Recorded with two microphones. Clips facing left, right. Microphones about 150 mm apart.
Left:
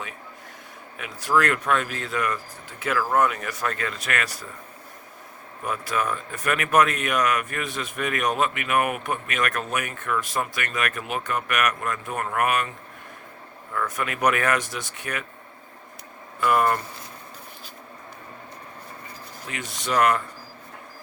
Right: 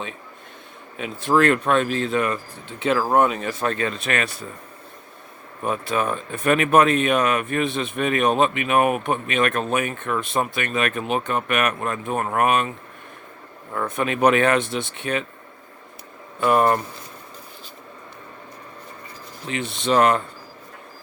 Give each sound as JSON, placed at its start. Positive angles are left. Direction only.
{"t": 0.9, "sound": "speech", "side_deg": -25}
{"t": 5.6, "sound": "speech", "side_deg": -25}
{"t": 13.7, "sound": "speech", "side_deg": -25}
{"t": 16.4, "sound": "speech", "side_deg": -25}
{"t": 19.5, "sound": "speech", "side_deg": -25}